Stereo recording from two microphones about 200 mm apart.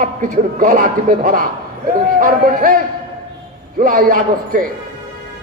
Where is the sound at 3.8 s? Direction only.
45° right (ahead or behind).